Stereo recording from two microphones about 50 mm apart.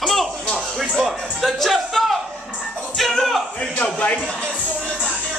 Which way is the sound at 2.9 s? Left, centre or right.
Centre.